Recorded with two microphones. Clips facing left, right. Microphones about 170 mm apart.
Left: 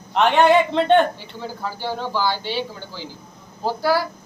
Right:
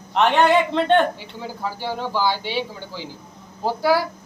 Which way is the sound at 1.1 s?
10° right (ahead or behind).